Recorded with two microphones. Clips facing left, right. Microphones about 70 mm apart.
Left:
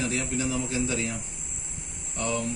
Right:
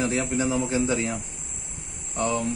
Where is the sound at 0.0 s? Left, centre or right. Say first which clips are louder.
Right 4 dB; right.